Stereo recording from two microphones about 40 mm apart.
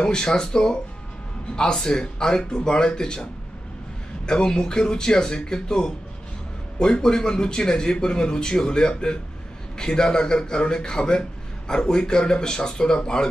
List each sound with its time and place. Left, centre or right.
0.0 s a man's voice: centre
4.3 s a man's voice: centre